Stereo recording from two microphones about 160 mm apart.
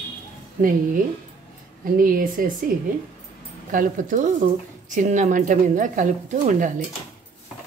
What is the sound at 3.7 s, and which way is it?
Speech, 55° right (ahead or behind).